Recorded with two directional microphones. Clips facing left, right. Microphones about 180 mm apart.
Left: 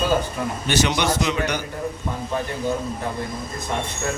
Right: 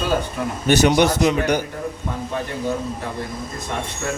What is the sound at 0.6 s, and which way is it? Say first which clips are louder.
Speech: right 7 dB; 50° right (ahead or behind).